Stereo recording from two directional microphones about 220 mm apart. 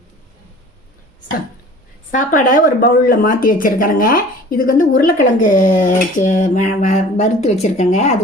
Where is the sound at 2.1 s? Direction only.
35° left (ahead or behind).